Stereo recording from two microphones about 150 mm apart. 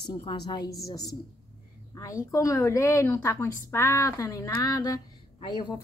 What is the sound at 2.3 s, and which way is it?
A woman's voice, 20° left (ahead or behind).